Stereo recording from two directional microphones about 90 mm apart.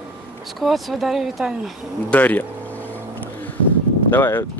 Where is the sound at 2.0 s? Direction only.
20° left (ahead or behind).